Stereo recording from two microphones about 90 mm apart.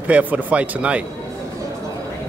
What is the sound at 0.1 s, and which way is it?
Speech, 15° right (ahead or behind).